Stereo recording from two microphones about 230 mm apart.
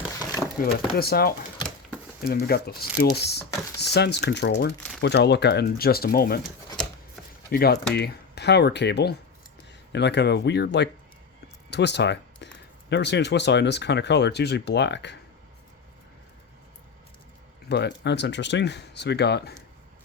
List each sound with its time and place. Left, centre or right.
0.6 s speech: left
7.5 s speech: left
11.7 s a sound: left
12.9 s speech: left
17.7 s speech: left